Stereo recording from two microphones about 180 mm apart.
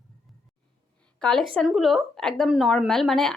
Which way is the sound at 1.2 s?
5° left (ahead or behind).